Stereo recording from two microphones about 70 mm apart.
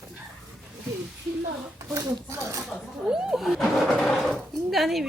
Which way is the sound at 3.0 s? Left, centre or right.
Centre.